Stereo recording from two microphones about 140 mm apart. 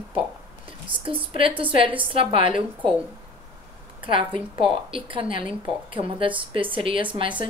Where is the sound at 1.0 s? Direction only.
40° right (ahead or behind).